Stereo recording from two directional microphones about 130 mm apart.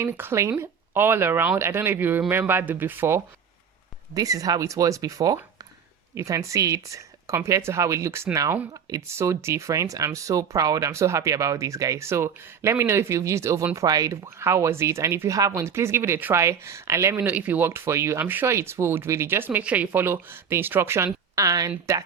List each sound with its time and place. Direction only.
0.0 s speech: 20° right (ahead or behind)
4.1 s speech: 25° right (ahead or behind)